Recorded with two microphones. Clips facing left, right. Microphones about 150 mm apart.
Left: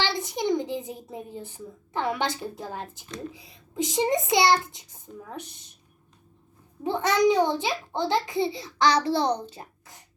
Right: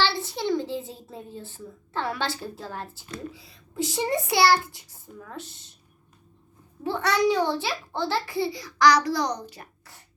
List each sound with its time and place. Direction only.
0.0 s a child's voice: 15° left (ahead or behind)
6.8 s a child's voice: 20° left (ahead or behind)